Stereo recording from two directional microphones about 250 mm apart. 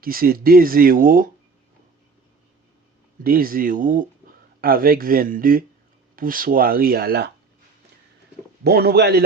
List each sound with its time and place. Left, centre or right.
0.0 s speech: right
3.2 s speech: right
8.6 s speech: right